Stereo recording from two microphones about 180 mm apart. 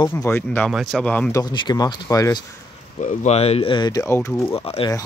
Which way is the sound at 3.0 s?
35° left (ahead or behind).